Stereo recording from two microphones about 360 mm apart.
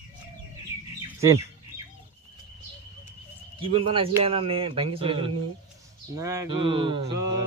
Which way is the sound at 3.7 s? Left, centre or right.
Centre.